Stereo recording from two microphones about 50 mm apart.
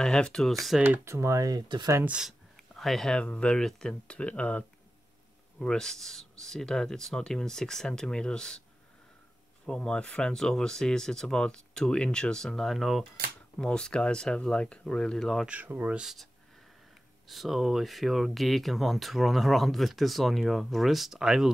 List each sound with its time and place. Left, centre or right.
0.0 s speech: centre
1.0 s speech: right
2.7 s a sound: centre
3.1 s speech: left
5.6 s speech: centre
9.7 s speech: centre
13.7 s speech: centre
15.6 s speech: right
17.3 s speech: centre